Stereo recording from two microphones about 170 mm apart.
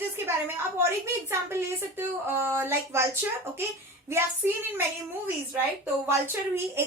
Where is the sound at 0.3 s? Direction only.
15° right (ahead or behind).